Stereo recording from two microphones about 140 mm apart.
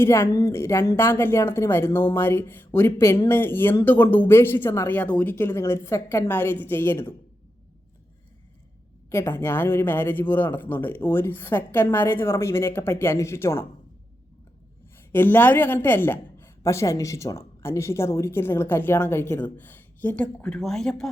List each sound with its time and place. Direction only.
0.0 s speech: 20° left (ahead or behind)
9.0 s speech: 20° left (ahead or behind)
15.1 s speech: 15° left (ahead or behind)